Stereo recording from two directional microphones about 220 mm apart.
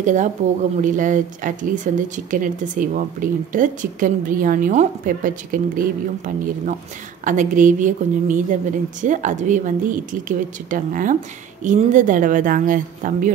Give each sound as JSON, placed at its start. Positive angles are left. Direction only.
{"t": 0.0, "sound": "speech", "side_deg": -35}